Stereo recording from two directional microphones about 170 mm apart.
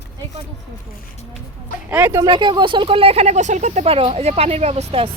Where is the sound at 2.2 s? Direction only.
30° right (ahead or behind).